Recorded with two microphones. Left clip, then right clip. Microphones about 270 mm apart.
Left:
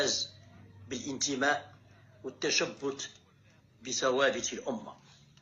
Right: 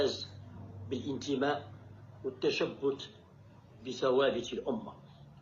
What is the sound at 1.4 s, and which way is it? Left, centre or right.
Speech, left.